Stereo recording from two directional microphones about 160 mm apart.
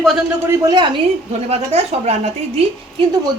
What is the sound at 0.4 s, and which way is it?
Speech, 20° right (ahead or behind).